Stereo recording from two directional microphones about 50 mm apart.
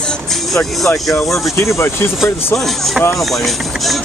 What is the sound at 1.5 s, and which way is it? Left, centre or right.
Speech, left.